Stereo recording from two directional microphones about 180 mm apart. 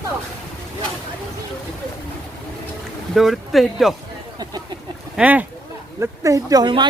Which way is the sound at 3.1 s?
Centre (ahead or behind).